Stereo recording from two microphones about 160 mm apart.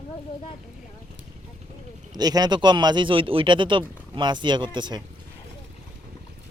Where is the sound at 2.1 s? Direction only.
25° right (ahead or behind).